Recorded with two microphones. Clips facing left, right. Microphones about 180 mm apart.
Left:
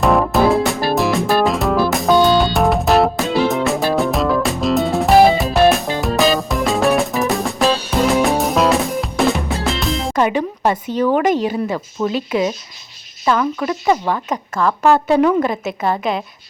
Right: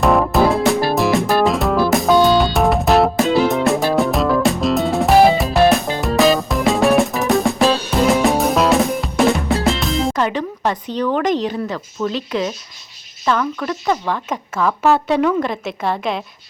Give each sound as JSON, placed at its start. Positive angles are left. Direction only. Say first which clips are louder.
{"t": 0.0, "sound": "music", "louder": "even", "side_deg": 0}
{"t": 10.2, "sound": "speech", "louder": "left 3 dB", "side_deg": 10}
{"t": 14.3, "sound": "speech", "louder": "left 1 dB", "side_deg": 0}